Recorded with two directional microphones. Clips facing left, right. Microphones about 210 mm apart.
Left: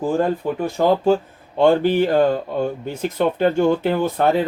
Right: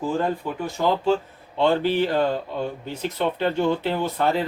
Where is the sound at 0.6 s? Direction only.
45° left (ahead or behind).